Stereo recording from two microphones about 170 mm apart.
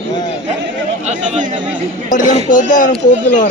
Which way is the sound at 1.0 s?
40° right (ahead or behind).